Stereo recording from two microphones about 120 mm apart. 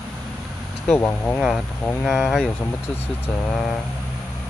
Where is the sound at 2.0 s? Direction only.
Centre (ahead or behind).